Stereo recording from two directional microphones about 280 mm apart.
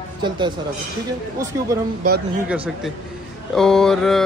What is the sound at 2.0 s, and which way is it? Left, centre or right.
Speech, right.